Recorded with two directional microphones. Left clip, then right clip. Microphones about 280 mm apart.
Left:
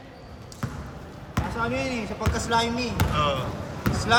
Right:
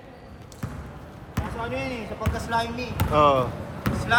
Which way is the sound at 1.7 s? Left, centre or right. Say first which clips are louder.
Left 2 dB; left.